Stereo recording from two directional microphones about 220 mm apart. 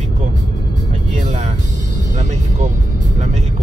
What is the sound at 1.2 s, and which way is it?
Speech, 30° right (ahead or behind).